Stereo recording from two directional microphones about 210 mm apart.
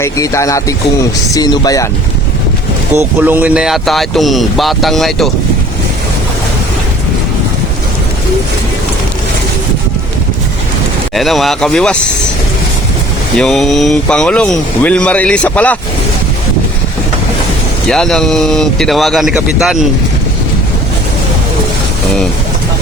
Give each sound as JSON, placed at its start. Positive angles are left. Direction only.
{"t": 0.0, "sound": "speech", "side_deg": 15}
{"t": 3.2, "sound": "speech", "side_deg": -10}
{"t": 11.1, "sound": "speech", "side_deg": 0}
{"t": 13.3, "sound": "speech", "side_deg": 5}
{"t": 17.8, "sound": "speech", "side_deg": 5}